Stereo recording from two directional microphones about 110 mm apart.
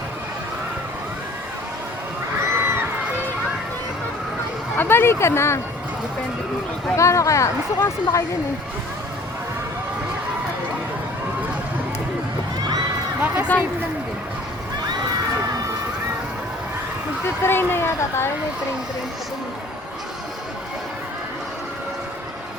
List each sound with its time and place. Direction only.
2.4 s crowd: 20° right (ahead or behind)
4.8 s speech: 20° left (ahead or behind)
6.9 s speech: 25° left (ahead or behind)
13.5 s speech: 15° left (ahead or behind)
17.4 s speech: 20° left (ahead or behind)